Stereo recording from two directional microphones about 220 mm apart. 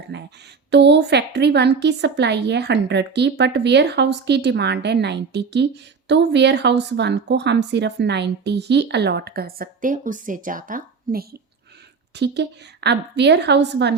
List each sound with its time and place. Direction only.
0.1 s speech: 50° right (ahead or behind)